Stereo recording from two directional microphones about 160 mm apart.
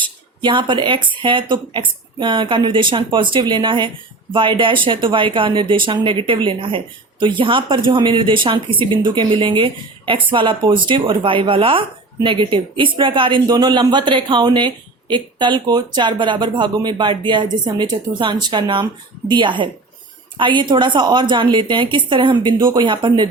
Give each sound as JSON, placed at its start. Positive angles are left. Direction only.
{"t": 0.0, "sound": "a woman's voice", "side_deg": -30}